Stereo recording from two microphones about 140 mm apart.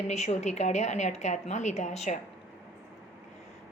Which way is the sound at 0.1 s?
55° left (ahead or behind).